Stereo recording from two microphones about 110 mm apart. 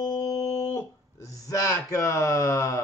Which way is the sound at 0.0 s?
30° left (ahead or behind).